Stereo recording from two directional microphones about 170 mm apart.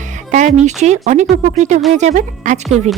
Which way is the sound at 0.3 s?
45° right (ahead or behind).